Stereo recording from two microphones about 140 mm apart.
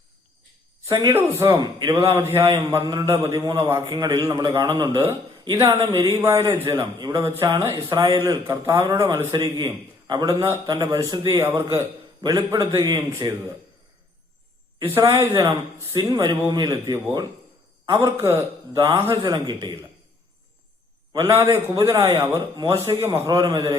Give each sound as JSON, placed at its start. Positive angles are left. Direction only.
{"t": 0.9, "sound": "a man's voice", "side_deg": -20}
{"t": 14.8, "sound": "a man's voice", "side_deg": -20}
{"t": 21.1, "sound": "a man's voice", "side_deg": -20}
{"t": 21.8, "sound": "a man's voice", "side_deg": -30}
{"t": 23.0, "sound": "a man's voice", "side_deg": -20}